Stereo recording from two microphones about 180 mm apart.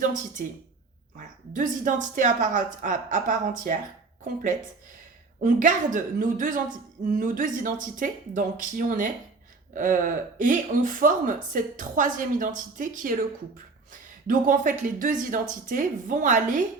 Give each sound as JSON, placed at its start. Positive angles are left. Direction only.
{"t": 0.0, "sound": "speech", "side_deg": -45}
{"t": 5.4, "sound": "speech", "side_deg": -45}
{"t": 14.3, "sound": "speech", "side_deg": -45}